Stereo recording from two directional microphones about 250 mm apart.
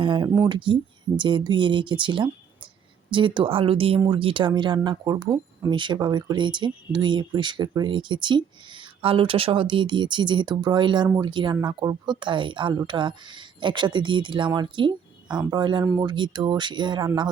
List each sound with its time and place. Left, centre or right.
0.0 s a woman's voice: centre